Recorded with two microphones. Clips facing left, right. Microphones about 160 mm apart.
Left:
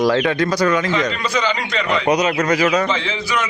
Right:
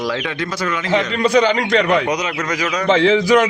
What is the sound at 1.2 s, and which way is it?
Speech, 55° right (ahead or behind).